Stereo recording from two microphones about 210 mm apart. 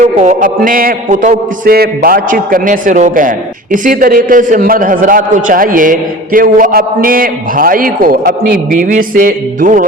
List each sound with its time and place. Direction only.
0.0 s a man's voice: 35° right (ahead or behind)